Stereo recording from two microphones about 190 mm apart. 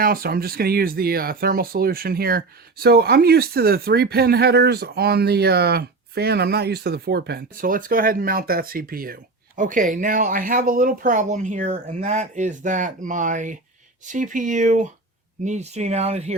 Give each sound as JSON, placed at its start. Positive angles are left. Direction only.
{"t": 0.0, "sound": "speech", "side_deg": -50}